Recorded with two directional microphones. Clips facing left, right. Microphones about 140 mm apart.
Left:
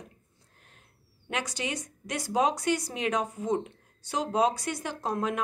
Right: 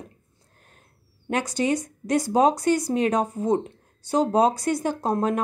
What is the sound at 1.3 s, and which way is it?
Speech, 45° right (ahead or behind).